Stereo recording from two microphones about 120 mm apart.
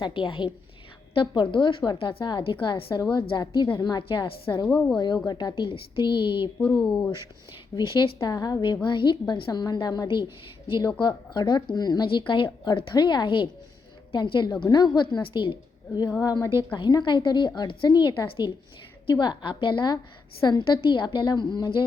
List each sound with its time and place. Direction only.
0.0 s a woman's voice: 45° left (ahead or behind)
4.6 s speech: 5° left (ahead or behind)
4.9 s speech: 35° left (ahead or behind)
6.8 s speech: 20° left (ahead or behind)
7.8 s a woman's voice: 40° left (ahead or behind)
16.2 s speech: 30° left (ahead or behind)